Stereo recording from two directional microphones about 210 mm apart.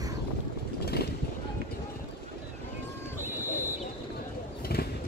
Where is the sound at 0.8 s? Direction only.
50° left (ahead or behind).